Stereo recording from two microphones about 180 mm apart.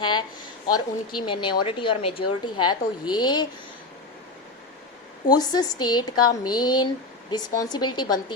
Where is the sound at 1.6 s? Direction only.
25° left (ahead or behind).